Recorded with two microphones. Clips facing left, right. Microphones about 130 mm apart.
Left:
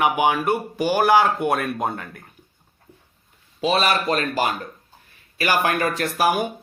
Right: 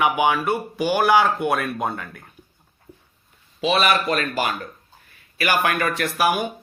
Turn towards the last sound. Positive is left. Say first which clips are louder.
# even
turn(degrees=35)  # may be behind; listen again after turning